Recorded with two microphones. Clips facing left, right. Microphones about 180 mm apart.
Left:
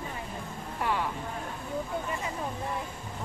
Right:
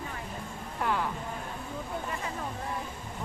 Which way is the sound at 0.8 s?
Centre (ahead or behind).